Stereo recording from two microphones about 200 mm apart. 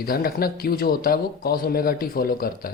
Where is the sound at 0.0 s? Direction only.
50° left (ahead or behind).